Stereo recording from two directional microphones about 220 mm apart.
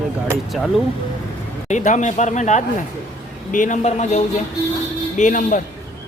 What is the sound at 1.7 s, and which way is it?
Speech, 35° left (ahead or behind).